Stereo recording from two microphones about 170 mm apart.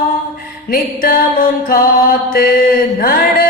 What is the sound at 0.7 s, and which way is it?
Music, 60° left (ahead or behind).